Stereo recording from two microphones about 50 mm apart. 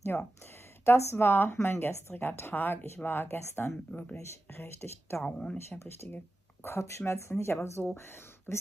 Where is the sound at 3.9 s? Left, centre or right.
Left.